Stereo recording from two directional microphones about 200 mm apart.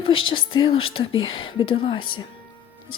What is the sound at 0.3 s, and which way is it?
A woman's voice, 25° left (ahead or behind).